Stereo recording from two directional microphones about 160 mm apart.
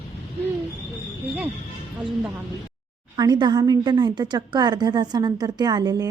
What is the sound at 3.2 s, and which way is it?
A woman's voice, 25° right (ahead or behind).